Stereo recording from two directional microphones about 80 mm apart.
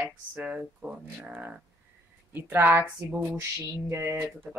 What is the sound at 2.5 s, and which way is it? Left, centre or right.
A woman's voice, right.